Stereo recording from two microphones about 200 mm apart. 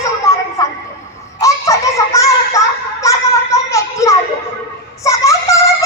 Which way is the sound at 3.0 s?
15° left (ahead or behind).